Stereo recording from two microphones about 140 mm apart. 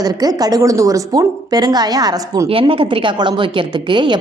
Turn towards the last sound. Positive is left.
turn(degrees=-35)  # may be behind; listen again after turning